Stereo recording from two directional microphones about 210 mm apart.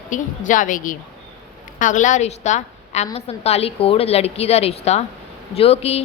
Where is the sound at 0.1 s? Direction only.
40° left (ahead or behind).